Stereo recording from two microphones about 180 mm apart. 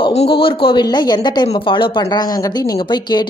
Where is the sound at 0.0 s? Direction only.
30° left (ahead or behind).